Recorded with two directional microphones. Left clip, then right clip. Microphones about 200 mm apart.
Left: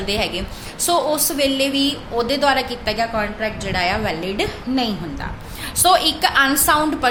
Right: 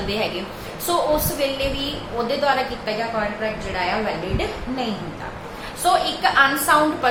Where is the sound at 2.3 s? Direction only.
55° left (ahead or behind).